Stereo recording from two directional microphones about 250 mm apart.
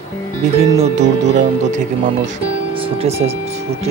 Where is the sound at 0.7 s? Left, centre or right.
Right.